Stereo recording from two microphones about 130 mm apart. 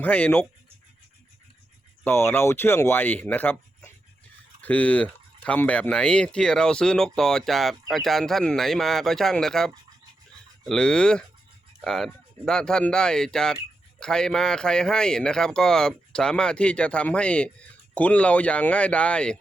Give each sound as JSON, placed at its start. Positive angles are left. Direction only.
{"t": 0.0, "sound": "a man's voice", "side_deg": 15}
{"t": 2.0, "sound": "a man's voice", "side_deg": 20}